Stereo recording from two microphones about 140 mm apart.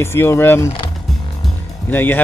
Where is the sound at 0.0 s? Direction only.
20° left (ahead or behind).